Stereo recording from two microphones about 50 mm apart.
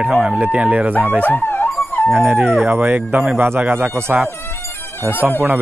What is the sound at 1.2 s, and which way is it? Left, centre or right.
Speech, left.